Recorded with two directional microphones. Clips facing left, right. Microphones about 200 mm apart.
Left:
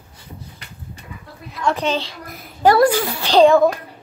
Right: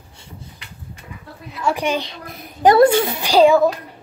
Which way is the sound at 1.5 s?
10° right (ahead or behind).